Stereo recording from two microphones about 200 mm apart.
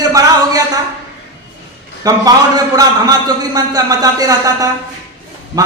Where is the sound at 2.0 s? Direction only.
20° right (ahead or behind).